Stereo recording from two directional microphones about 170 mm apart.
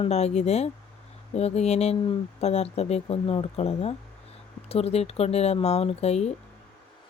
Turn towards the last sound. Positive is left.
turn(degrees=40)  # may be behind; listen again after turning